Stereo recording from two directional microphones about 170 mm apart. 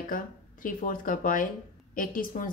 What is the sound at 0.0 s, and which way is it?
A woman's voice, 55° left (ahead or behind).